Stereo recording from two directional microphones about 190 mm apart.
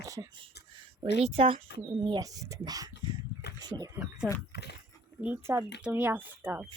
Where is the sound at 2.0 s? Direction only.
20° right (ahead or behind).